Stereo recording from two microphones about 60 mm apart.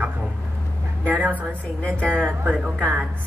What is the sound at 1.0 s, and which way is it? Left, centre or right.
Speech, right.